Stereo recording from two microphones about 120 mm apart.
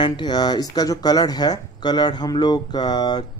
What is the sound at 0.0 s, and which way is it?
Speech, 40° left (ahead or behind).